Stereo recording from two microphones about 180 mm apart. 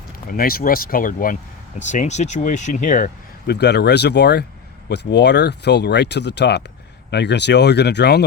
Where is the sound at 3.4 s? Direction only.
65° left (ahead or behind).